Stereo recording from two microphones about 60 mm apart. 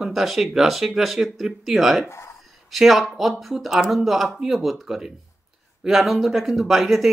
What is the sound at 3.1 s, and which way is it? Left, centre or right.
Speech, centre.